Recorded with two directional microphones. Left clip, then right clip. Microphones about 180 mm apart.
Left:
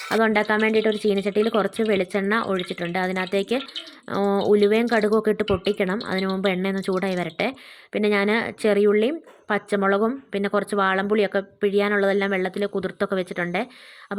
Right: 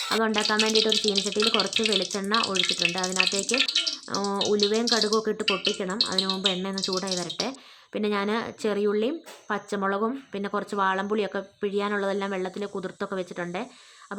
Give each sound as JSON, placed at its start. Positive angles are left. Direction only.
{"t": 0.1, "sound": "speech", "side_deg": 30}